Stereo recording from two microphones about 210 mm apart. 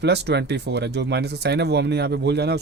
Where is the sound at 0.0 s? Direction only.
55° right (ahead or behind).